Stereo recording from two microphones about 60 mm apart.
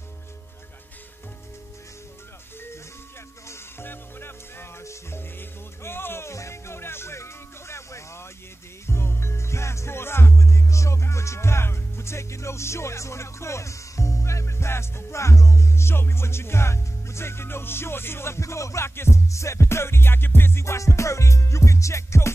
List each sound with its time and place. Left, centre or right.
3.8 s music: left